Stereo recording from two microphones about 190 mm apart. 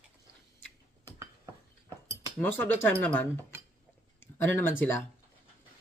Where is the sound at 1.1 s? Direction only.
15° right (ahead or behind).